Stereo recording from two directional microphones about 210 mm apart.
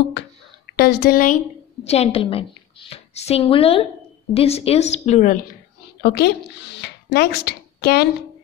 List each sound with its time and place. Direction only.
0.7 s speech: 50° left (ahead or behind)
1.9 s a woman's voice: 30° left (ahead or behind)
6.0 s speech: 50° left (ahead or behind)
6.8 s a sound: 50° left (ahead or behind)